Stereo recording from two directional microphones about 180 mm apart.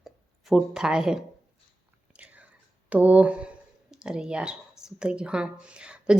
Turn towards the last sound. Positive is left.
turn(degrees=-5)  # may be behind; listen again after turning